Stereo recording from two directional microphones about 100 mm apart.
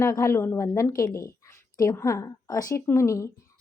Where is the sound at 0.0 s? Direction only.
30° left (ahead or behind).